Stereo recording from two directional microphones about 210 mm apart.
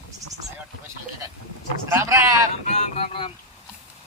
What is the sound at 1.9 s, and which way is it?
Speech, 15° right (ahead or behind).